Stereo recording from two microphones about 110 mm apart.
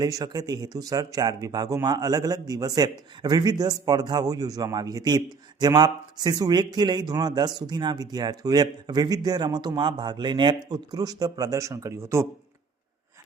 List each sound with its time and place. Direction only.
0.0 s speech: 35° right (ahead or behind)